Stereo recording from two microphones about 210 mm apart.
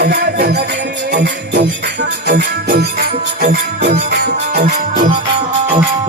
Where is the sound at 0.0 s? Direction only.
50° right (ahead or behind).